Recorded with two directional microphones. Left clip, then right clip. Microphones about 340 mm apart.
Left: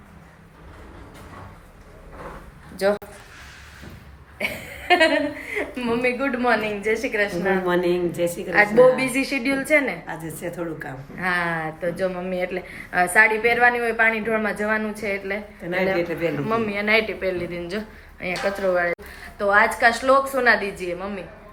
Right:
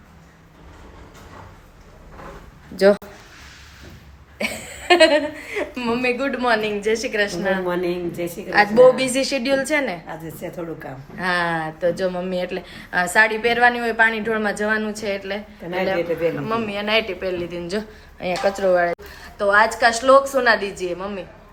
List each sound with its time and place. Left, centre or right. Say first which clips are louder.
2.7 s speech: right 6 dB; right
4.4 s a sound: right 1 dB; centre
5.5 s a woman's voice: right 2 dB; centre